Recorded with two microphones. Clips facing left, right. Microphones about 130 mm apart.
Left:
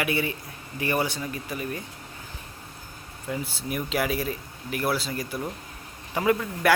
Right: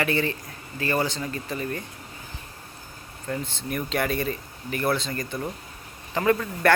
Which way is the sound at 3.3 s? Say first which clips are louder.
Right 1 dB; 5° left (ahead or behind).